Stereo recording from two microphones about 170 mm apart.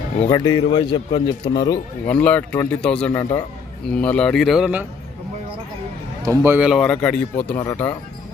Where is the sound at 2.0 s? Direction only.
10° left (ahead or behind).